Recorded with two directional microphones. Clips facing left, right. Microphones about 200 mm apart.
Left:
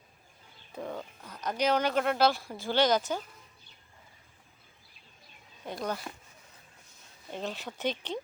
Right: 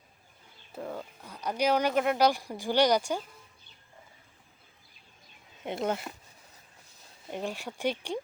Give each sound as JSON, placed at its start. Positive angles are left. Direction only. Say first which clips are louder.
{"t": 0.7, "sound": "speech", "louder": "even", "side_deg": -5}
{"t": 5.6, "sound": "speech", "louder": "right 4 dB", "side_deg": -25}
{"t": 7.3, "sound": "speech", "louder": "right 2 dB", "side_deg": -10}